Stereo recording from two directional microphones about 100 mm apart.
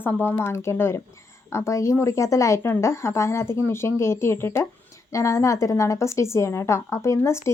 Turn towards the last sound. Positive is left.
turn(degrees=30)  # may be behind; listen again after turning